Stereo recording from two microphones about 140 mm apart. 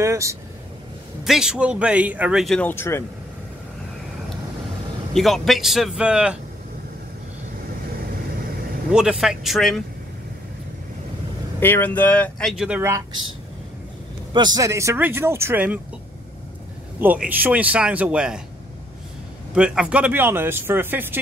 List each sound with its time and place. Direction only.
0.0 s speech: 20° right (ahead or behind)
1.2 s a man's voice: 5° right (ahead or behind)
2.4 s speech: 5° left (ahead or behind)
2.7 s speech: 15° left (ahead or behind)
5.1 s speech: centre (ahead or behind)
8.9 s speech: 5° right (ahead or behind)
11.6 s speech: 15° left (ahead or behind)
12.5 s a man's voice: 5° right (ahead or behind)
14.3 s speech: 30° right (ahead or behind); by 15.8 s 10° right (ahead or behind)
17.0 s a man's voice: 10° right (ahead or behind)
19.5 s a man's voice: 5° right (ahead or behind)